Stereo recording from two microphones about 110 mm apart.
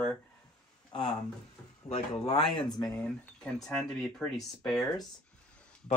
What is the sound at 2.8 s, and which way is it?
Speech, 5° left (ahead or behind).